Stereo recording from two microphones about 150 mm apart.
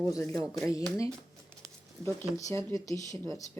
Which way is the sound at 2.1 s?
20° left (ahead or behind).